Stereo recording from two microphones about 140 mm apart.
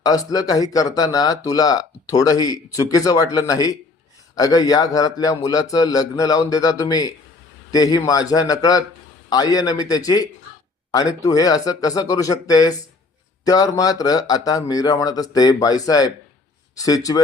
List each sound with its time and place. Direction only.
0.0 s speech: 25° left (ahead or behind)